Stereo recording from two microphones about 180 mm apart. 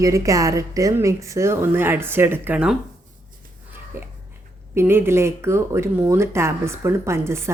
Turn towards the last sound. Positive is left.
turn(degrees=-15)  # may be behind; listen again after turning